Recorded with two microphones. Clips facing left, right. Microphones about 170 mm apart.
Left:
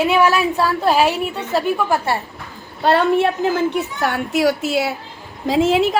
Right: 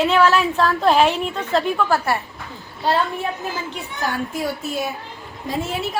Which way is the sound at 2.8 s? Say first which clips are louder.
Left 6 dB; 70° left (ahead or behind).